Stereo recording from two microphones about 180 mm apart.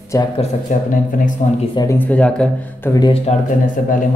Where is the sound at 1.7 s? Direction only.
20° left (ahead or behind).